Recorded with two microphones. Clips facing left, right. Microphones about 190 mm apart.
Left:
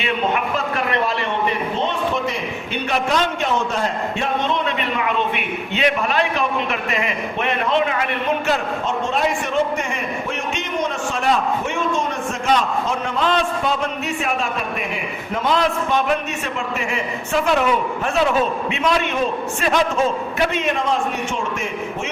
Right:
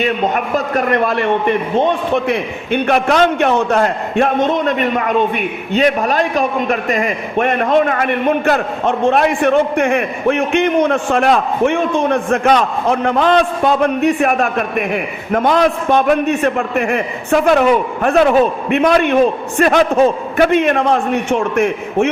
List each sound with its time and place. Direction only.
0.0 s a man's voice: 45° right (ahead or behind); by 22.1 s 60° right (ahead or behind)